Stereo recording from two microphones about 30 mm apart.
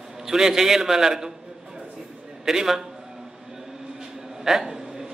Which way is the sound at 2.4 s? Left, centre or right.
Centre.